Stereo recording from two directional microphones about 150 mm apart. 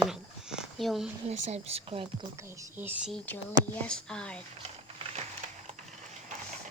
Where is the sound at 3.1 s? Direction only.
10° left (ahead or behind).